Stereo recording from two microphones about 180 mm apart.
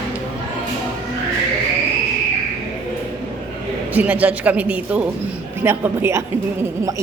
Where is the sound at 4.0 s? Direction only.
10° right (ahead or behind).